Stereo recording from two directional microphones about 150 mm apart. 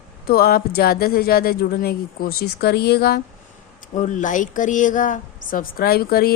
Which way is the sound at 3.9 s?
55° left (ahead or behind).